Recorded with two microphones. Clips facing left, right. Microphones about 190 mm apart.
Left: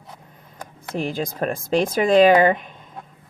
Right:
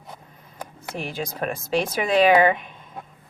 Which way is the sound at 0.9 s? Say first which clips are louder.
Left 5 dB; 35° left (ahead or behind).